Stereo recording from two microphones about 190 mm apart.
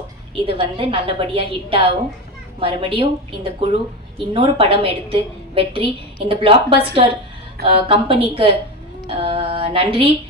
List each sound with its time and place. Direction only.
0.5 s a woman's voice: 30° right (ahead or behind)